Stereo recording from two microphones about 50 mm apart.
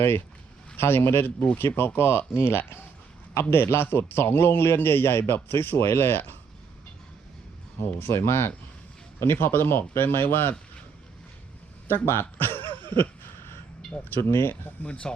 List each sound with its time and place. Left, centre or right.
0.8 s a man's voice: left
7.8 s a man's voice: left
11.9 s a man's voice: left
12.4 s a sound: left
14.2 s speech: left
14.6 s speech: left